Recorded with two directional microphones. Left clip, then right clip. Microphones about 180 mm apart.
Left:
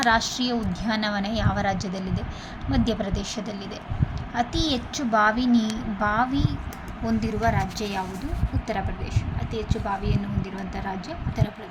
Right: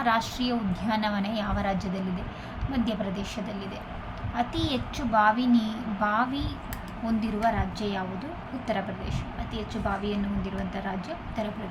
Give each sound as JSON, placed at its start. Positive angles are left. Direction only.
{"t": 0.0, "sound": "a woman's voice", "side_deg": 25}
{"t": 9.6, "sound": "speech", "side_deg": 10}